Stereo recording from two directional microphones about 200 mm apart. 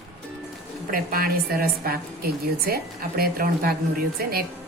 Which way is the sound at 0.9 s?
45° right (ahead or behind).